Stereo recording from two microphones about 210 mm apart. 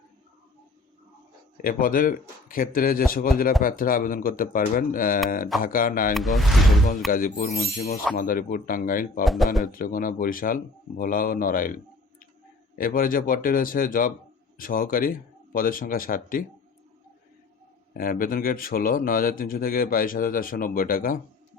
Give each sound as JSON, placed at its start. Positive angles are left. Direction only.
{"t": 1.6, "sound": "speech", "side_deg": 40}
{"t": 6.1, "sound": "speech", "side_deg": 0}
{"t": 7.1, "sound": "speech", "side_deg": 40}
{"t": 9.2, "sound": "speech", "side_deg": 0}
{"t": 9.6, "sound": "speech", "side_deg": 40}
{"t": 17.9, "sound": "speech", "side_deg": 40}